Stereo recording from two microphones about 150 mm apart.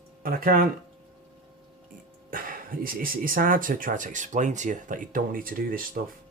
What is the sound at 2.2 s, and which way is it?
Speech, 70° right (ahead or behind).